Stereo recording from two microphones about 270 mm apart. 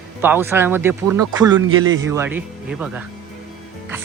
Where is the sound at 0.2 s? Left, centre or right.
Centre.